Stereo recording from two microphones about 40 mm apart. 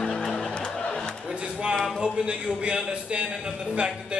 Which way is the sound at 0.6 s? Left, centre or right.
Left.